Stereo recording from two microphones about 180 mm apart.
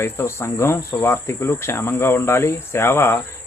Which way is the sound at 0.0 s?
15° left (ahead or behind).